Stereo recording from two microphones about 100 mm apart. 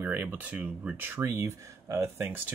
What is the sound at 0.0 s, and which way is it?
Speech, 20° right (ahead or behind).